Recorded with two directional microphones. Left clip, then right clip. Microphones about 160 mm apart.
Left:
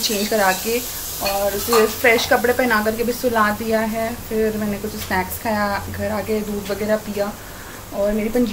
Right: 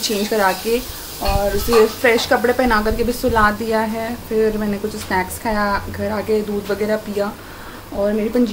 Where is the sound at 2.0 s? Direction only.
15° right (ahead or behind).